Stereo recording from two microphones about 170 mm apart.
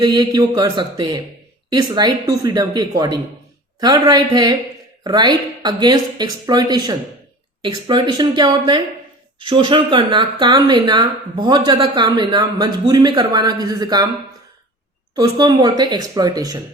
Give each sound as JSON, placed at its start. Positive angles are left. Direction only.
{"t": 0.0, "sound": "speech", "side_deg": -25}
{"t": 15.1, "sound": "speech", "side_deg": -25}